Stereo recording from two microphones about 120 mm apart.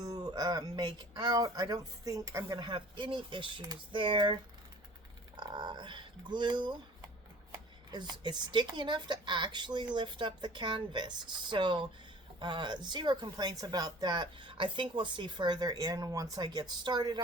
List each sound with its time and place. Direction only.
0.0 s speech: 35° right (ahead or behind)
5.4 s speech: 35° right (ahead or behind)
7.9 s speech: 35° right (ahead or behind)